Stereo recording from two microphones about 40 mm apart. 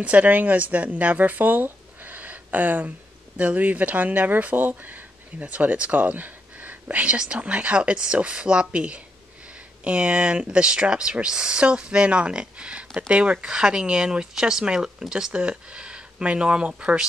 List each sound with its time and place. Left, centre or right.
0.0 s speech: right